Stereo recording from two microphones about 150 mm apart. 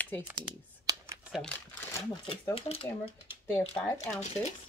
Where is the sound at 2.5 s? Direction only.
40° left (ahead or behind).